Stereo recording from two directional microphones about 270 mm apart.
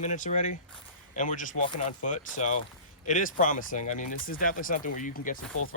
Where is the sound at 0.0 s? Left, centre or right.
Left.